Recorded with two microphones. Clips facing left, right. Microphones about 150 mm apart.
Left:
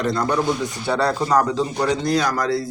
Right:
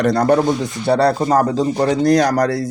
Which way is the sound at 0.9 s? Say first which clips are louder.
Right 6 dB; 35° right (ahead or behind).